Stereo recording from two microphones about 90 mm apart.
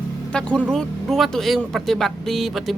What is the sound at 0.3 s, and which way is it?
Speech, 10° left (ahead or behind).